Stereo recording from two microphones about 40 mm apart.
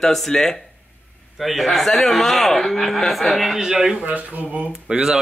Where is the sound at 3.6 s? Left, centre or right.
Centre.